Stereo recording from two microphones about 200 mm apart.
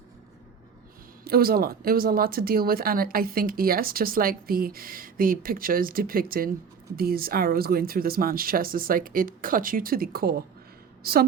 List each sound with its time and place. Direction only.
1.2 s a woman's voice: 50° right (ahead or behind)